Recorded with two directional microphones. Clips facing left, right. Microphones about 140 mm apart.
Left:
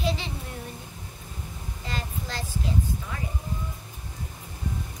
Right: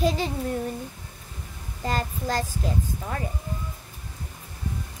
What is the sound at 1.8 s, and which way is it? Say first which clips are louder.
Speech: right 7 dB; 45° right (ahead or behind).